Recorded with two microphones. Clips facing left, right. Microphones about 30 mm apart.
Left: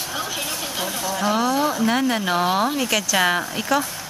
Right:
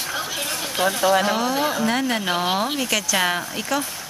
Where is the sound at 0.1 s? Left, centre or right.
Centre.